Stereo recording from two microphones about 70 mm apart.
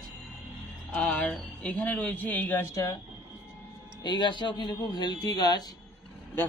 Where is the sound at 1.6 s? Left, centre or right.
Left.